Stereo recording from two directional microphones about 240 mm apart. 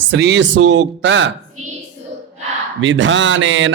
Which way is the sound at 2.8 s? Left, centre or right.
Right.